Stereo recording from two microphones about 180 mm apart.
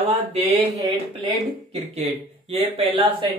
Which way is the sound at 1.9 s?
35° right (ahead or behind).